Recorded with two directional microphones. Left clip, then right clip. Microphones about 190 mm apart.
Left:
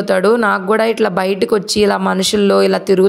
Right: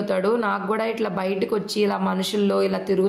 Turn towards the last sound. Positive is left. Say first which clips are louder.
# left 10 dB
turn(degrees=40)  # may be behind; listen again after turning